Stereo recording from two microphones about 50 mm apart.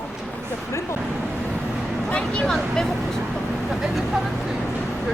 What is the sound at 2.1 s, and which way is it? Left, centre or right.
Speech, left.